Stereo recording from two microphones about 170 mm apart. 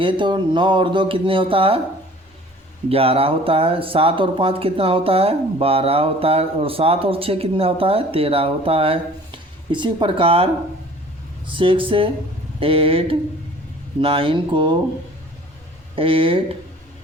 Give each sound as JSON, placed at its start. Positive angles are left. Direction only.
{"t": 0.0, "sound": "speech", "side_deg": -30}
{"t": 2.9, "sound": "speech", "side_deg": -35}
{"t": 16.0, "sound": "speech", "side_deg": -30}